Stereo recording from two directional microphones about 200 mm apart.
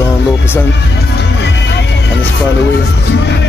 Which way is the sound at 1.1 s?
60° left (ahead or behind).